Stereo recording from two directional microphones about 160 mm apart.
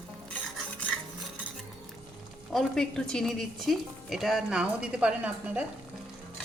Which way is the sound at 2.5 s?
5° left (ahead or behind).